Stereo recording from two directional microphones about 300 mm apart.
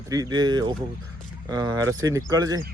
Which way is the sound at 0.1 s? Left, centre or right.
Centre.